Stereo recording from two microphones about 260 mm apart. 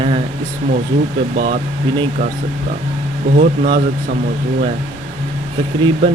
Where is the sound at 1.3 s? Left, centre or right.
Right.